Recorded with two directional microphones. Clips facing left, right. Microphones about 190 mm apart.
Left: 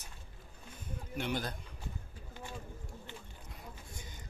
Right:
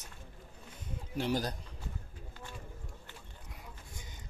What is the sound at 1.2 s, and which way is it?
Speech, 35° right (ahead or behind).